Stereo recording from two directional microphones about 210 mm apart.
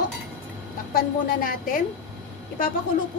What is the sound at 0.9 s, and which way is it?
Speech, 40° left (ahead or behind).